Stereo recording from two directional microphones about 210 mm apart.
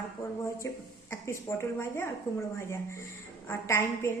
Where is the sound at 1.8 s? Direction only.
10° left (ahead or behind).